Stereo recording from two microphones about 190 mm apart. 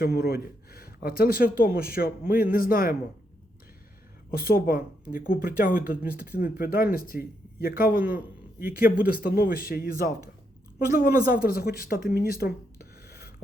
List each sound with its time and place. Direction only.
0.0 s speech: 55° left (ahead or behind)
4.3 s speech: 50° left (ahead or behind)
8.0 s a man's voice: 10° right (ahead or behind)
9.0 s a woman's voice: 50° left (ahead or behind)
13.0 s a sound: 55° left (ahead or behind)